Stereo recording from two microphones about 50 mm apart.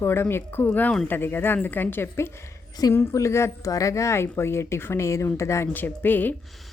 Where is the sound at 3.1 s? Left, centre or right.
Left.